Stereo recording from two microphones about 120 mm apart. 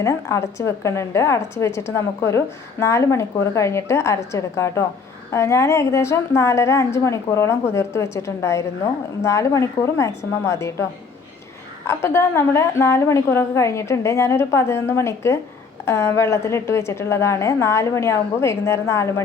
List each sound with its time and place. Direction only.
0.0 s a woman's voice: 25° left (ahead or behind)
11.9 s a woman's voice: 20° left (ahead or behind)